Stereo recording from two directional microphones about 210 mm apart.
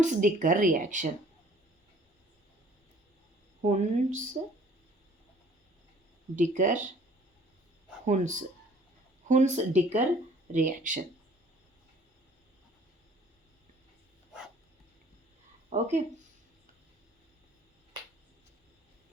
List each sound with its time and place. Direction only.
0.0 s speech: 40° right (ahead or behind)
3.6 s speech: 35° right (ahead or behind)
6.3 s speech: 35° right (ahead or behind)
8.0 s speech: 35° right (ahead or behind)
15.7 s speech: 35° right (ahead or behind)